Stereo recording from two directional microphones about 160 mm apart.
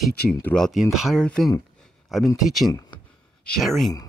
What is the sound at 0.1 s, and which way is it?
Speech, 85° left.